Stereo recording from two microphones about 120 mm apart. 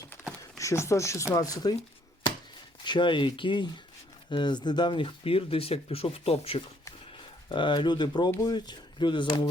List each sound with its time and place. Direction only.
0.6 s speech: 25° left (ahead or behind)
2.8 s speech: 40° left (ahead or behind)
7.5 s speech: 40° left (ahead or behind)